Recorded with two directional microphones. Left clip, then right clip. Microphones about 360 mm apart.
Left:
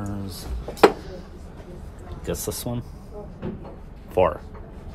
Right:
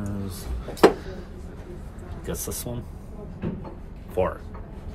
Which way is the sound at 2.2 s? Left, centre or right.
Left.